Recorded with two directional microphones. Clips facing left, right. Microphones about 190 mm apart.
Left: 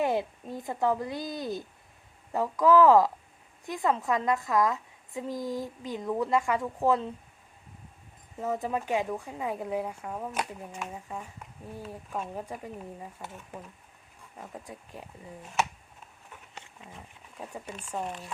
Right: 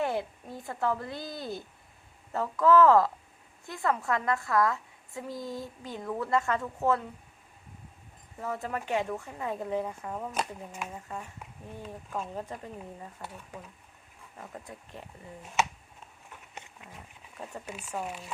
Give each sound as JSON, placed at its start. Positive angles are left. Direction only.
{"t": 0.0, "sound": "a woman's voice", "side_deg": 15}
{"t": 8.4, "sound": "a woman's voice", "side_deg": 20}
{"t": 10.9, "sound": "a woman's voice", "side_deg": 10}
{"t": 17.7, "sound": "speech", "side_deg": -5}